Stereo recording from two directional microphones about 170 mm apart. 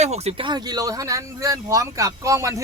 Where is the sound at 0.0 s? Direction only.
40° right (ahead or behind).